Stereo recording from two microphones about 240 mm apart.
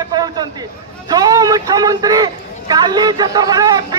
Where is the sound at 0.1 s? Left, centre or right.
Centre.